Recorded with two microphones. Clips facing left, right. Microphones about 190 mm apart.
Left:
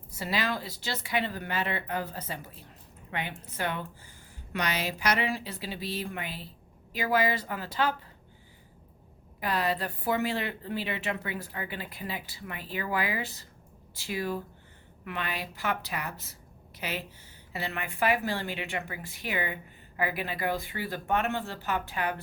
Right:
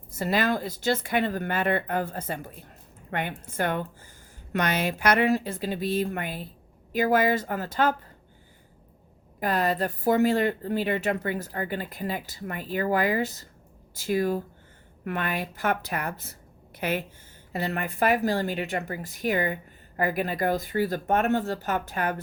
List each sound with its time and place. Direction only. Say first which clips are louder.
0.1 s speech: right 6 dB; 50° right (ahead or behind)
9.4 s a woman's voice: right 4 dB; 45° right (ahead or behind)